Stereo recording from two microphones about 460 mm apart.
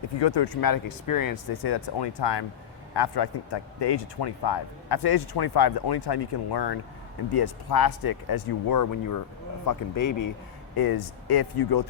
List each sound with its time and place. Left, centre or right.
0.2 s a man's voice: left